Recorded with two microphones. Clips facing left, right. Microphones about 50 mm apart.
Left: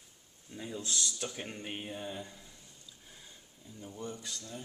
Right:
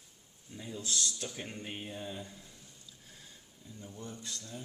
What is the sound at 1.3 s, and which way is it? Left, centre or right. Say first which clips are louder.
Speech: left 1 dB; centre.